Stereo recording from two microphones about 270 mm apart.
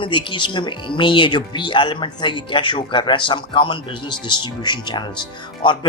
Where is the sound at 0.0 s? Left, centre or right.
Centre.